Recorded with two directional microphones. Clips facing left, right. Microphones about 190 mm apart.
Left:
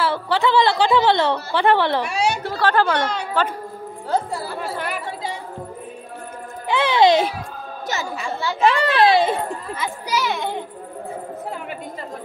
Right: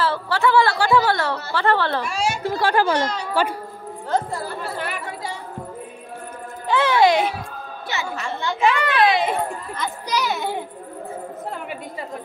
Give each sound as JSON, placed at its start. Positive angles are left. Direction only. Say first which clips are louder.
{"t": 0.0, "sound": "a woman's voice", "louder": "left 1 dB", "side_deg": 15}
{"t": 2.0, "sound": "a woman's voice", "louder": "left 2 dB", "side_deg": 65}
{"t": 2.4, "sound": "a woman's voice", "louder": "right 3 dB", "side_deg": -15}
{"t": 4.1, "sound": "speech", "louder": "left 1 dB", "side_deg": 10}
{"t": 6.7, "sound": "a child's voice", "louder": "even", "side_deg": 15}
{"t": 7.9, "sound": "a woman's voice", "louder": "left 1 dB", "side_deg": 40}
{"t": 9.8, "sound": "a child's voice", "louder": "even", "side_deg": 5}